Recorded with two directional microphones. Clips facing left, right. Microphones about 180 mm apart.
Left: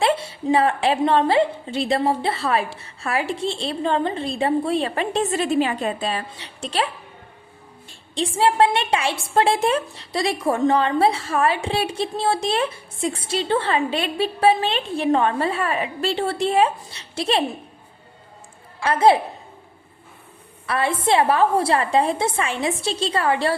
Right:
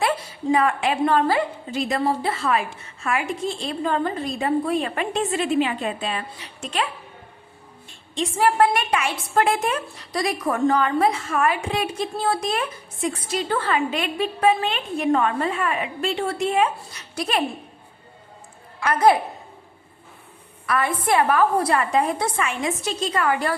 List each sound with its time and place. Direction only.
0.0 s a woman's voice: 25° left (ahead or behind)
8.1 s a woman's voice: 30° left (ahead or behind)
16.7 s a woman's voice: 25° left (ahead or behind)
18.8 s a woman's voice: 25° left (ahead or behind)
20.7 s a woman's voice: 25° left (ahead or behind)